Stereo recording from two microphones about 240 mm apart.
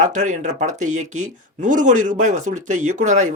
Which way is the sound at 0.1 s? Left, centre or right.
Right.